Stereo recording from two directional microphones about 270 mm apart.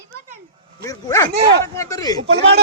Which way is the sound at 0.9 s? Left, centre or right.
Centre.